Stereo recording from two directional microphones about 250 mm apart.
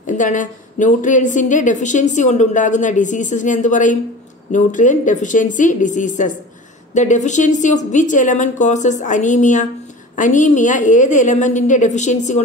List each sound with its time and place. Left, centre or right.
0.0 s a woman's voice: left